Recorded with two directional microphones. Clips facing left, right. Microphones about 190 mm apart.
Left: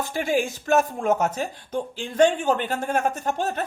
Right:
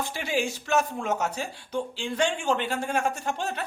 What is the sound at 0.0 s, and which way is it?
Speech, 45° left (ahead or behind).